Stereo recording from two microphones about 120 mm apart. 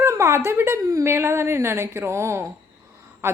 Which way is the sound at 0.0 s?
25° right (ahead or behind).